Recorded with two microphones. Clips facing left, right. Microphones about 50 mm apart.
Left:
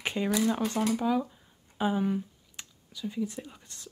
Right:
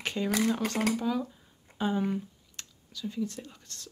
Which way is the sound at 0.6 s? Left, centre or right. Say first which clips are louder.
Left 1 dB; right.